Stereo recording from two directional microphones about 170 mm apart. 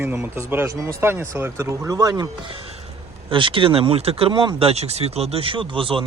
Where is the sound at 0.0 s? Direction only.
10° right (ahead or behind).